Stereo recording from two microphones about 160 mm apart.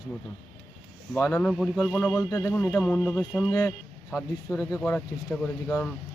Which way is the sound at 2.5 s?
5° left (ahead or behind).